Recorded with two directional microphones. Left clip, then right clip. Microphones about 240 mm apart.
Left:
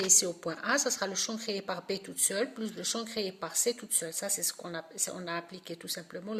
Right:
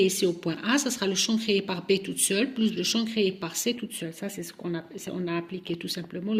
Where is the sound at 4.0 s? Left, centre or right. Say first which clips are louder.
Even; left.